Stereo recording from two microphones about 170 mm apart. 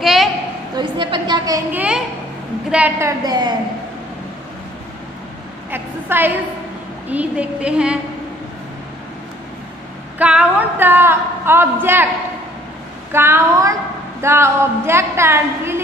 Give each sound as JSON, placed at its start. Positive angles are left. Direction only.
{"t": 0.0, "sound": "a sound", "side_deg": 0}
{"t": 0.7, "sound": "a woman's voice", "side_deg": -25}
{"t": 1.7, "sound": "a woman's voice", "side_deg": -10}
{"t": 5.7, "sound": "a woman's voice", "side_deg": -10}
{"t": 10.1, "sound": "a woman's voice", "side_deg": -5}
{"t": 13.1, "sound": "a woman's voice", "side_deg": -15}